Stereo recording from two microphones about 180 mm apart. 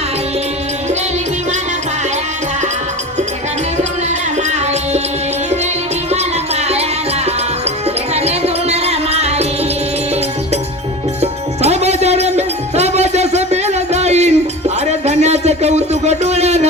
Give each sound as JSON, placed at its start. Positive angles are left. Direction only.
{"t": 4.4, "sound": "music", "side_deg": -40}
{"t": 6.1, "sound": "music", "side_deg": -35}
{"t": 8.1, "sound": "music", "side_deg": -35}
{"t": 11.2, "sound": "music", "side_deg": -35}
{"t": 14.8, "sound": "a sound", "side_deg": -40}